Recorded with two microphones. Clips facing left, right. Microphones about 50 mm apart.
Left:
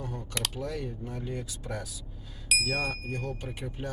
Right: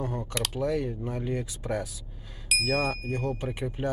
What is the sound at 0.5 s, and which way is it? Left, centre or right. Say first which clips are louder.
Speech: right 7 dB; right.